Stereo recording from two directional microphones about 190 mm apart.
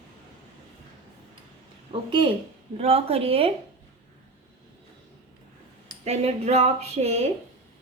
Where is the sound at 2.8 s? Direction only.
30° right (ahead or behind).